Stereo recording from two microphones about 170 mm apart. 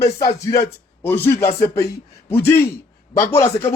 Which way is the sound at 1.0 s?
10° left (ahead or behind).